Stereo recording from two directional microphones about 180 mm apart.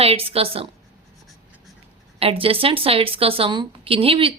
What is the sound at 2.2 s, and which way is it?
A woman's voice, 30° right (ahead or behind).